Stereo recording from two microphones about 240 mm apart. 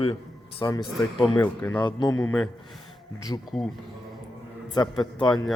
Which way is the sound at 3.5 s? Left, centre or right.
Centre.